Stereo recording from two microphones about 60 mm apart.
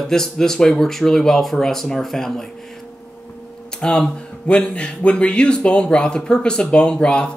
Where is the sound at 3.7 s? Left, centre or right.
Centre.